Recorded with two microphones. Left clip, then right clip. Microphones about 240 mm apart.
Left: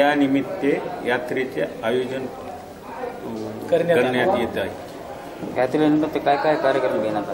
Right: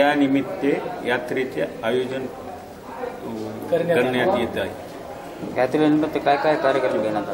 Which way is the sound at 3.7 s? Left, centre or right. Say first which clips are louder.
Left 2 dB; centre.